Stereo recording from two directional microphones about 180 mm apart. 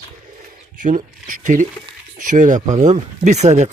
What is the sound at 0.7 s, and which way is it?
Speech, 50° right (ahead or behind).